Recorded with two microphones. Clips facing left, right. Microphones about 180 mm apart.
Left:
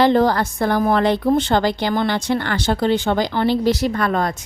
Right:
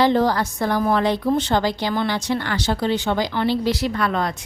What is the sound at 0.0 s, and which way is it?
A woman's voice, 55° left (ahead or behind).